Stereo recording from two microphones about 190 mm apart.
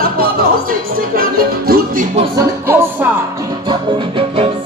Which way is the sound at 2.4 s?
10° right (ahead or behind).